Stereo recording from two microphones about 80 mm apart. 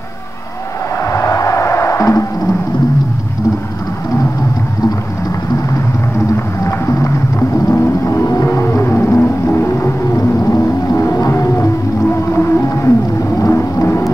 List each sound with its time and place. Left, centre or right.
1.1 s music: left
7.3 s a sound: left
12.4 s music: left